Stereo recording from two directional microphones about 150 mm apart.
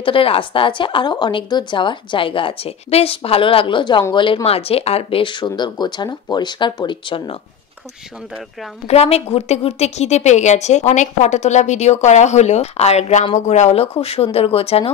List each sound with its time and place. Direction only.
0.0 s a woman's voice: 35° left (ahead or behind)
8.8 s a woman's voice: 45° left (ahead or behind)